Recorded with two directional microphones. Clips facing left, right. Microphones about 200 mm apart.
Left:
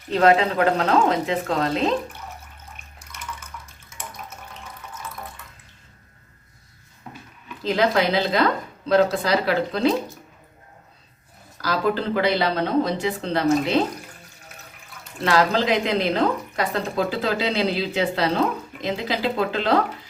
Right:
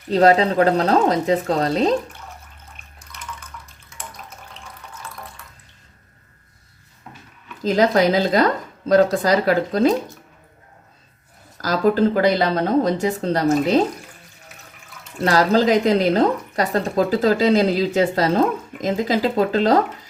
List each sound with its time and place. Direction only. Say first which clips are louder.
0.1 s speech: right 3 dB; 35° right (ahead or behind)
7.6 s a woman's voice: right 4 dB; 40° right (ahead or behind)
11.5 s a woman's voice: right 5 dB; 45° right (ahead or behind)
15.2 s a woman's voice: right 4 dB; 40° right (ahead or behind)